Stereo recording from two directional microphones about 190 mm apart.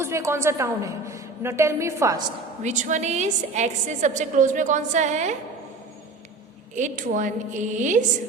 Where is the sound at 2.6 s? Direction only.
40° right (ahead or behind).